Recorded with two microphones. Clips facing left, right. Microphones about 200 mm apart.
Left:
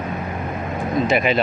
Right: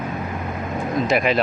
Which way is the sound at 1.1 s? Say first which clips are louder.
Even; centre (ahead or behind).